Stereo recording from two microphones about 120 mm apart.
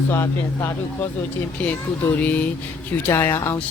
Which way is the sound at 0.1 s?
25° left (ahead or behind).